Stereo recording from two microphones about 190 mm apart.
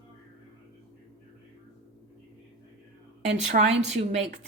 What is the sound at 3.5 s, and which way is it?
Speech, 35° right (ahead or behind).